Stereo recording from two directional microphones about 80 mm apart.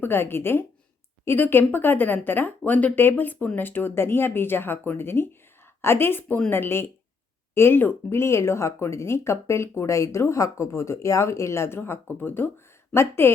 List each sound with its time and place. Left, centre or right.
0.0 s speech: left